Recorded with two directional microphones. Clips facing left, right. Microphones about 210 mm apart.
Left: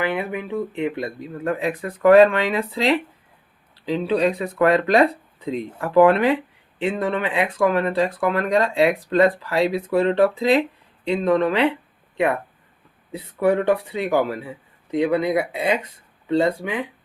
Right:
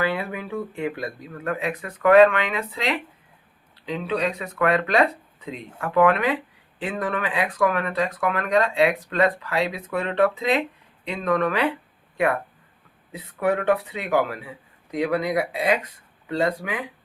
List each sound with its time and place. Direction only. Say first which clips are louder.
0.0 s speech: left 2 dB; 20° left (ahead or behind)
13.1 s speech: left 4 dB; 30° left (ahead or behind)